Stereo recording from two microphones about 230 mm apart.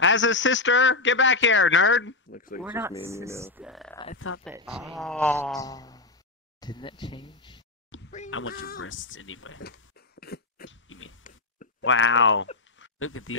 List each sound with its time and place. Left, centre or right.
0.0 s a man's voice: left
2.3 s speech: left
2.6 s speech: centre
4.3 s speech: left
4.6 s speech: centre
7.9 s quack: left
8.3 s speech: left
9.6 s a sound: left
10.2 s dog: left
11.8 s speech: left
12.7 s a sound: left